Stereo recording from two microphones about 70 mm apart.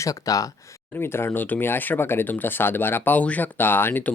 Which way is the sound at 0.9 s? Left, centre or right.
Left.